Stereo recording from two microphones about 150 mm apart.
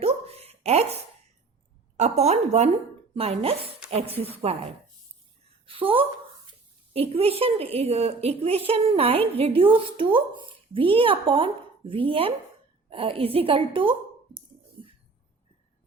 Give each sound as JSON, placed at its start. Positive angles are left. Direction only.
{"t": 0.0, "sound": "a sound", "side_deg": -40}
{"t": 2.0, "sound": "a woman's voice", "side_deg": -50}
{"t": 5.6, "sound": "a woman's voice", "side_deg": -35}